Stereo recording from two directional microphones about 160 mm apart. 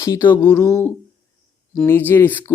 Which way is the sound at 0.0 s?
15° left (ahead or behind).